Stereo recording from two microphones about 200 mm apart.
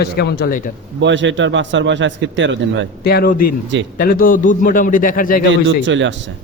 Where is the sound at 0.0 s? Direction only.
50° left (ahead or behind).